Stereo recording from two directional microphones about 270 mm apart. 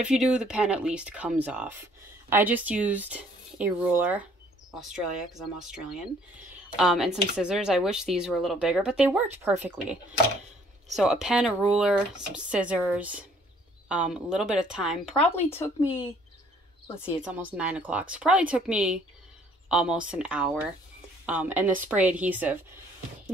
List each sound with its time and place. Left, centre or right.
0.0 s speech: centre
3.8 s a sound: centre
5.7 s speech: centre
11.0 s speech: centre
15.1 s speech: left
15.5 s speech: centre
17.2 s a woman's voice: centre